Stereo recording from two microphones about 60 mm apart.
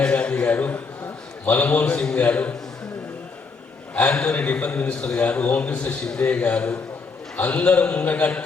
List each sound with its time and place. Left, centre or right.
0.0 s a man's voice: centre
3.9 s a man's voice: left